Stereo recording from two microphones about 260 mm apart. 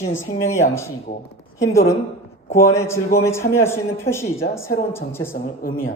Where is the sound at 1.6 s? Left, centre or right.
Centre.